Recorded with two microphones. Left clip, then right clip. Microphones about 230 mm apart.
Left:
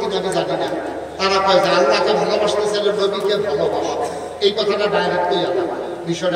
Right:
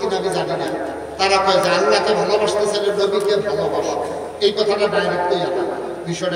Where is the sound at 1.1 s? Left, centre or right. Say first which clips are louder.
Even; right.